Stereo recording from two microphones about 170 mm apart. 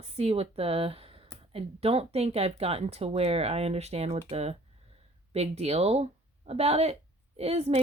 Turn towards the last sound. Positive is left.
turn(degrees=-40)  # may be behind; listen again after turning